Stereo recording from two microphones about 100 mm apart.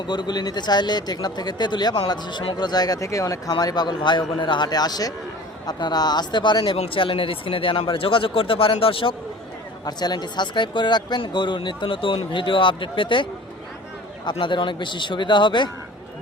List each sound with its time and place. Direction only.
0.0 s speech: 50° left (ahead or behind)
3.5 s speech: 45° left (ahead or behind)
6.6 s speech: 70° left (ahead or behind)
9.8 s speech: 45° left (ahead or behind)
14.3 s speech: 55° left (ahead or behind)